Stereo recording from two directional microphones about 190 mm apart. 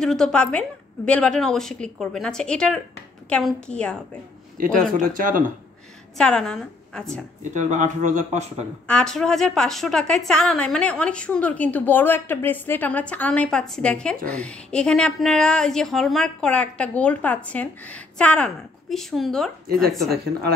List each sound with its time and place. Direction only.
0.0 s a woman's voice: 5° left (ahead or behind)
4.6 s speech: 45° right (ahead or behind)
6.1 s a woman's voice: 5° left (ahead or behind)
7.5 s speech: 40° right (ahead or behind)
8.8 s a woman's voice: 5° left (ahead or behind)